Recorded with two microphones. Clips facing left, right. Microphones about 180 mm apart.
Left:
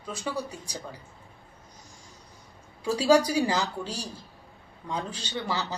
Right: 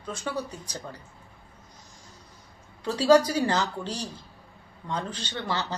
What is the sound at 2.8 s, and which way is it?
Speech, 10° left (ahead or behind).